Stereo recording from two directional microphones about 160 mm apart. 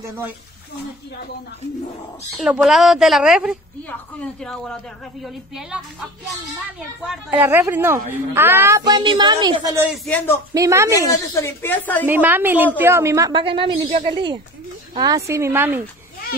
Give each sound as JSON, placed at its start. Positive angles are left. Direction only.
{"t": 2.3, "sound": "a woman's voice", "side_deg": -5}
{"t": 7.2, "sound": "a woman's voice", "side_deg": -10}
{"t": 10.0, "sound": "a woman's voice", "side_deg": 10}
{"t": 10.5, "sound": "a woman's voice", "side_deg": -20}
{"t": 11.0, "sound": "a woman's voice", "side_deg": 20}
{"t": 12.1, "sound": "a woman's voice", "side_deg": -10}
{"t": 13.3, "sound": "a woman's voice", "side_deg": -35}